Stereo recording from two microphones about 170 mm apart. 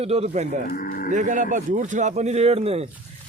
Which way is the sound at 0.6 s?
55° left (ahead or behind).